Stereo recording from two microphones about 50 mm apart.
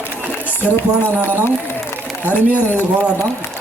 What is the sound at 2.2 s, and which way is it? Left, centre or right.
Speech, left.